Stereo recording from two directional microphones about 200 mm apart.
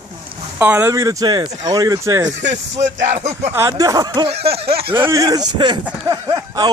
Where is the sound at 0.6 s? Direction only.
10° right (ahead or behind).